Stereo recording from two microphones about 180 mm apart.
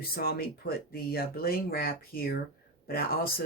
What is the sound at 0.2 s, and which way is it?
Speech, 60° left (ahead or behind).